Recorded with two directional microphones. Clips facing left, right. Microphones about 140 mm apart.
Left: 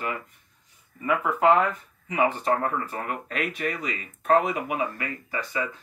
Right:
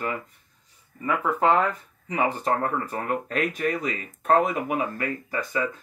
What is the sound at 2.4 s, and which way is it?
Speech, 40° right (ahead or behind).